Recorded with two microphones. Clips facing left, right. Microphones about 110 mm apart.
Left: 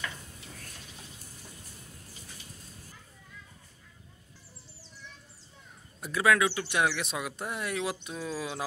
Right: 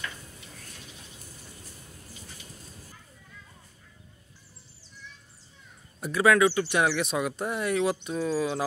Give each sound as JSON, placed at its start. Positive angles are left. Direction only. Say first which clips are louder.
{"t": 5.9, "sound": "speech", "louder": "right 4 dB", "side_deg": 0}